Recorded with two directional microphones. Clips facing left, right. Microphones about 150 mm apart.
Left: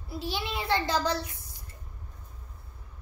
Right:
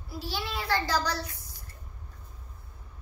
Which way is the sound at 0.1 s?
20° left (ahead or behind).